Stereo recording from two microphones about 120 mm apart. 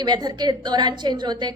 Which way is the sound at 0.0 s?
35° right (ahead or behind).